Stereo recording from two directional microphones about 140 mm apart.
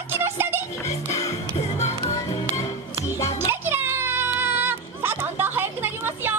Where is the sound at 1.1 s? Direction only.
20° left (ahead or behind).